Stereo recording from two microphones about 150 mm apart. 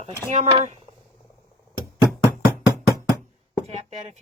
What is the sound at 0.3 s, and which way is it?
Speech, 50° right (ahead or behind).